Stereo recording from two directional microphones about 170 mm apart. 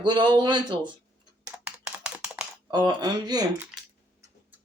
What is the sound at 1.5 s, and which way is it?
Typing, 5° right (ahead or behind).